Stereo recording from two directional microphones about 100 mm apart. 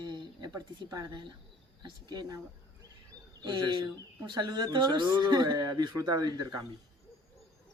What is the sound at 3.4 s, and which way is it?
Speech, 50° right (ahead or behind).